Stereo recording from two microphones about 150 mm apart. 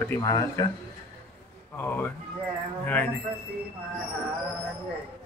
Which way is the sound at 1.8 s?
15° left (ahead or behind).